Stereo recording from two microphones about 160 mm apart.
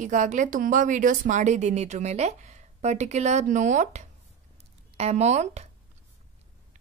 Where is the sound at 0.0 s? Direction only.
50° right (ahead or behind).